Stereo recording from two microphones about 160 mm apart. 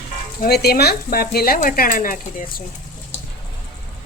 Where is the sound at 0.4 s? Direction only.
80° left; by 2.6 s 60° left (ahead or behind).